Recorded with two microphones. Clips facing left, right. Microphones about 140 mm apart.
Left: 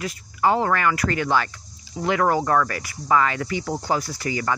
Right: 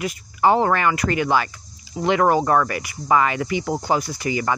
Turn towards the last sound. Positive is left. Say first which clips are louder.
# right 2 dB
turn(degrees=-15)  # may be behind; listen again after turning